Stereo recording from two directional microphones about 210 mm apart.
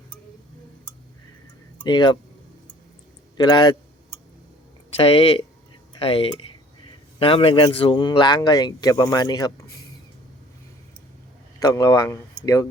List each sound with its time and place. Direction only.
1.8 s speech: 20° left (ahead or behind)
3.3 s speech: 20° left (ahead or behind)
4.9 s speech: 25° left (ahead or behind)
11.6 s speech: 15° left (ahead or behind)